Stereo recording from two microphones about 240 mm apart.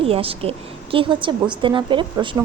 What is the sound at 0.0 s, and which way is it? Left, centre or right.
A woman's voice, right.